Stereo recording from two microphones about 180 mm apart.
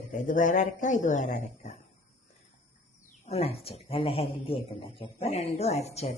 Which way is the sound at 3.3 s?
35° left (ahead or behind).